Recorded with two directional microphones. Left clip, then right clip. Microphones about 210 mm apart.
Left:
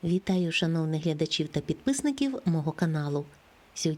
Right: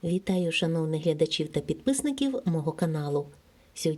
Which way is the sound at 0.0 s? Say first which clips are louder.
Right 1 dB; 20° left (ahead or behind).